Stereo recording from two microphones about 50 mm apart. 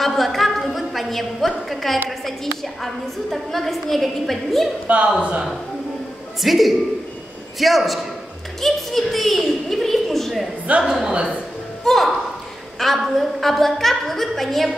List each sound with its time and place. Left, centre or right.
0.0 s a sound: centre
2.0 s a woman's voice: centre
4.8 s a man's voice: right
6.4 s a woman's voice: centre
8.5 s a sound: centre
10.8 s a woman's voice: centre
11.1 s speech: centre
11.8 s a sound: centre
12.7 s a woman's voice: centre